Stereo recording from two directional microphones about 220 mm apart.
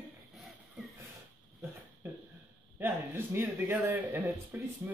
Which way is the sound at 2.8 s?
10° right (ahead or behind).